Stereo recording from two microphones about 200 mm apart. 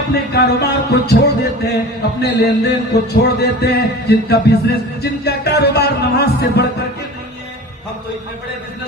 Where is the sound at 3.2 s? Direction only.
55° left (ahead or behind).